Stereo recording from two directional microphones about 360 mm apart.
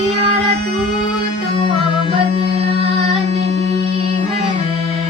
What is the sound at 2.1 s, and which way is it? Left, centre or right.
Music, centre.